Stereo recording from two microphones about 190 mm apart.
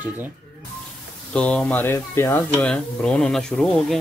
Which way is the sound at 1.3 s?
5° left (ahead or behind).